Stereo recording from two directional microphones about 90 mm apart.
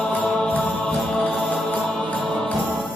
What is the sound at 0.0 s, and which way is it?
Mantra, 15° left (ahead or behind).